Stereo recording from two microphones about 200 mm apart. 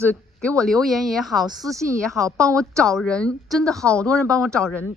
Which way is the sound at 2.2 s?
15° right (ahead or behind).